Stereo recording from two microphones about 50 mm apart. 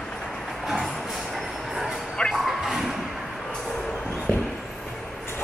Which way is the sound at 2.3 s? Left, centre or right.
Centre.